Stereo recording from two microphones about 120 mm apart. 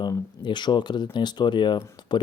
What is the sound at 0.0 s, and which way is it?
Speech, 40° left (ahead or behind).